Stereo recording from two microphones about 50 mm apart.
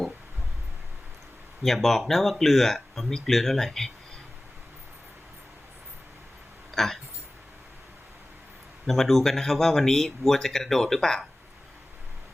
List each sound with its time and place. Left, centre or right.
1.6 s speech: centre
6.7 s speech: centre
8.9 s speech: centre